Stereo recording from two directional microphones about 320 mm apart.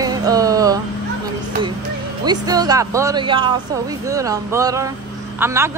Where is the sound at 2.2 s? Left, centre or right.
Centre.